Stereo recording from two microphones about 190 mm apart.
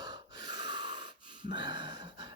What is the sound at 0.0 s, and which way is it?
Gasp, 20° right (ahead or behind).